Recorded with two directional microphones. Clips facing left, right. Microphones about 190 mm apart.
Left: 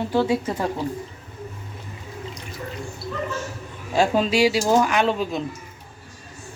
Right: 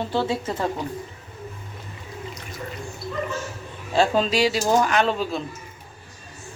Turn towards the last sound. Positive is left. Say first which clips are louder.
# left 1 dB
turn(degrees=15)  # may be behind; listen again after turning